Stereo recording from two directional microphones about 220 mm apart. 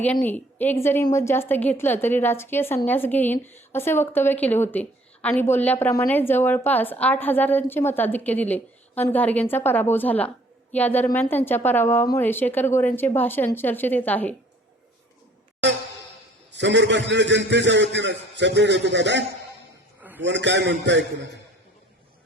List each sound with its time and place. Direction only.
0.0 s a woman's voice: 5° left (ahead or behind)
16.5 s a man's voice: 55° right (ahead or behind)
20.0 s a sound: 5° right (ahead or behind)
20.2 s a man's voice: 55° right (ahead or behind)